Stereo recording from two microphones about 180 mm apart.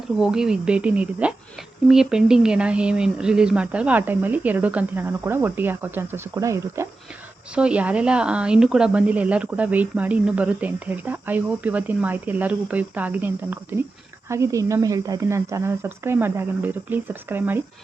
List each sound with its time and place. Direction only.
0.2 s speech: 5° right (ahead or behind)
7.5 s speech: 5° right (ahead or behind)